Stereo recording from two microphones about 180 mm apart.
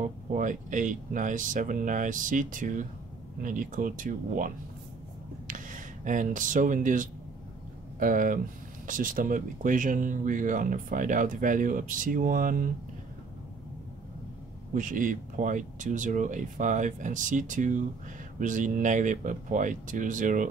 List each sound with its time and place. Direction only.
0.3 s speech: 45° right (ahead or behind)
5.5 s speech: 45° right (ahead or behind)
14.7 s speech: 45° right (ahead or behind)